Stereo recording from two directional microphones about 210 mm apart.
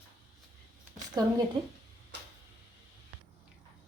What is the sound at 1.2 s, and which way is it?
Speech, 20° right (ahead or behind).